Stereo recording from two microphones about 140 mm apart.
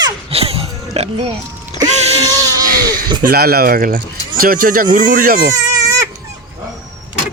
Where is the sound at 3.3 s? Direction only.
90° right.